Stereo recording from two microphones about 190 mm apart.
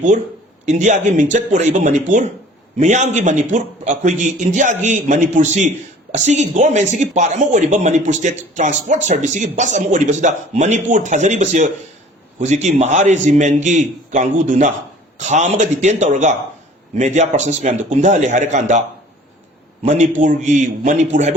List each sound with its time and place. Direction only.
0.6 s a man's voice: 40° right (ahead or behind)